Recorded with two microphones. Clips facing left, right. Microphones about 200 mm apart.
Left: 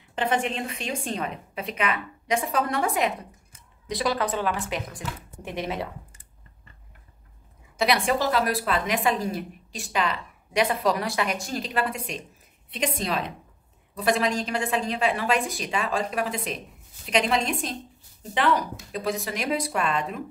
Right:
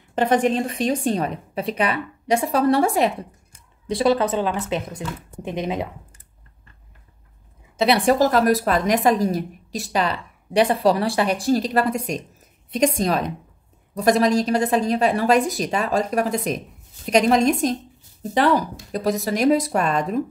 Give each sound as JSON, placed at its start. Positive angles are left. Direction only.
{"t": 0.1, "sound": "a woman's voice", "side_deg": -40}
{"t": 7.7, "sound": "a woman's voice", "side_deg": -30}